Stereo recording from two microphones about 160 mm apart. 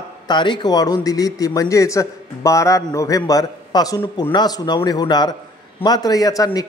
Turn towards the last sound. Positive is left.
turn(degrees=20)  # may be behind; listen again after turning